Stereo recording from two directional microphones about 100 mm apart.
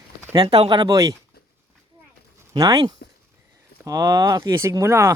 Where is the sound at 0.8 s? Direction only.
35° right (ahead or behind).